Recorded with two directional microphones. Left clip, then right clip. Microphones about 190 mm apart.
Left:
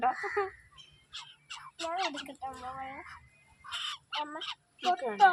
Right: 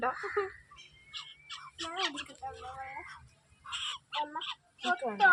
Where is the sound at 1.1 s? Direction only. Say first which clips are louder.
Right 1 dB; 10° left (ahead or behind).